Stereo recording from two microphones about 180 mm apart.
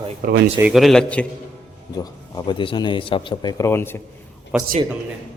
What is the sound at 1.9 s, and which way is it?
Speech, 25° left (ahead or behind).